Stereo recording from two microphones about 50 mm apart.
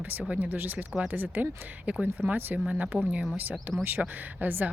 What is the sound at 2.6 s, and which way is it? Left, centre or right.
Speech, right.